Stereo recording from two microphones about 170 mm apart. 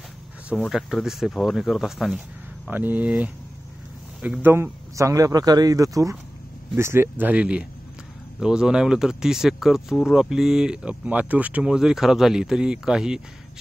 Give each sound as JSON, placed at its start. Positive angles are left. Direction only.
{"t": 0.6, "sound": "speech", "side_deg": 0}